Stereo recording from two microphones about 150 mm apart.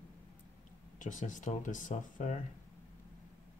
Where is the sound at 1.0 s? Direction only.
55° left (ahead or behind).